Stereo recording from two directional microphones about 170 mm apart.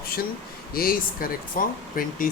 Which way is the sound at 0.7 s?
60° left (ahead or behind).